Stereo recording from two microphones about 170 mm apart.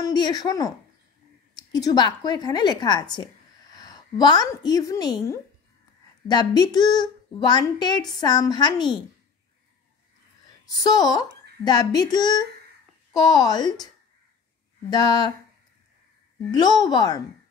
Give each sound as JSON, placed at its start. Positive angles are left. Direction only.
{"t": 0.0, "sound": "a woman's voice", "side_deg": 25}
{"t": 10.6, "sound": "speech", "side_deg": 20}
{"t": 14.9, "sound": "speech", "side_deg": 25}
{"t": 16.5, "sound": "speech", "side_deg": 25}